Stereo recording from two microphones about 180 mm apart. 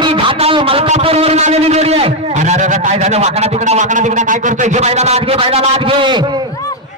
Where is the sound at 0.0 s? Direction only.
30° right (ahead or behind).